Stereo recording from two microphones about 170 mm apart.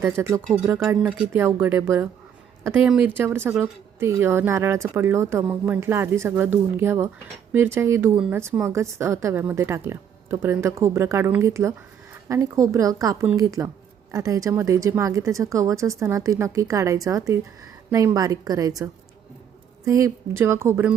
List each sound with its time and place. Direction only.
0.0 s a woman's voice: 15° right (ahead or behind)
19.8 s a woman's voice: 20° right (ahead or behind)